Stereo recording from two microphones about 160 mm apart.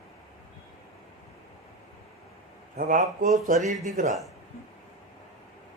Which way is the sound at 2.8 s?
55° right (ahead or behind).